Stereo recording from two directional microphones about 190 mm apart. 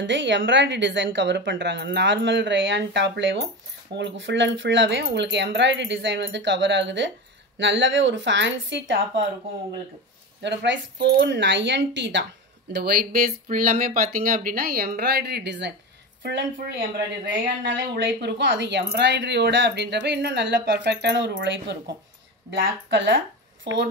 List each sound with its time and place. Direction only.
0.0 s a woman's voice: 70° right (ahead or behind)
10.4 s a woman's voice: 65° right (ahead or behind)
12.8 s a woman's voice: 50° right (ahead or behind); by 21.7 s 70° right (ahead or behind)
22.8 s a woman's voice: 75° right (ahead or behind)